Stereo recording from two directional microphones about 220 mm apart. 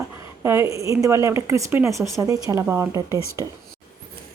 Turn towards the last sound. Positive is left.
turn(degrees=-15)  # may be behind; listen again after turning